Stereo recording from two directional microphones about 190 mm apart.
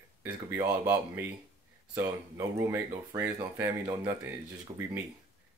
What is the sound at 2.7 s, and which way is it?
Speech, 10° right (ahead or behind).